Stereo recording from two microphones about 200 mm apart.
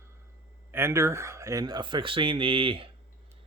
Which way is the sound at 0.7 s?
15° right (ahead or behind).